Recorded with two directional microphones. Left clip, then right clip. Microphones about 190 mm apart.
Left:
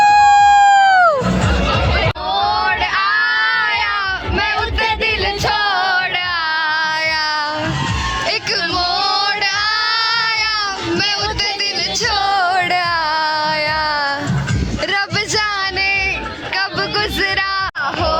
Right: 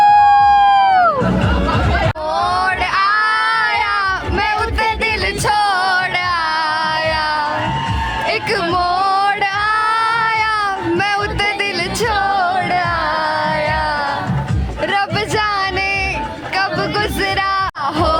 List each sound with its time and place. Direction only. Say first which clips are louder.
0.0 s siren: even; 10° right (ahead or behind)
2.3 s a sound: even; 35° right (ahead or behind)
4.4 s music: left 1 dB; 30° right (ahead or behind)
8.7 s music: right 3 dB; 25° right (ahead or behind)
12.4 s music: left 1 dB; 10° left (ahead or behind)
15.4 s a sound: right 1 dB; 15° right (ahead or behind)